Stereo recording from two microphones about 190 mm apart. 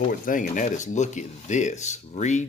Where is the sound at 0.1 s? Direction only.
45° left (ahead or behind).